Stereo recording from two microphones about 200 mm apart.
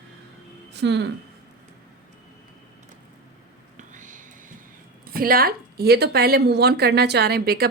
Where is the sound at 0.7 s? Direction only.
60° right (ahead or behind).